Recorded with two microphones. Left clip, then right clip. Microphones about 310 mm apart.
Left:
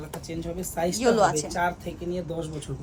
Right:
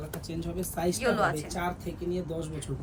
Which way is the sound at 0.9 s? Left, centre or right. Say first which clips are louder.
Left 7 dB; centre.